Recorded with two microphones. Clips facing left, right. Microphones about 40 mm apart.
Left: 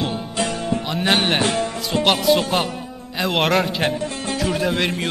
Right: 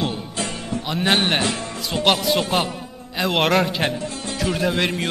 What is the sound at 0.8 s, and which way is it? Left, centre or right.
Speech, centre.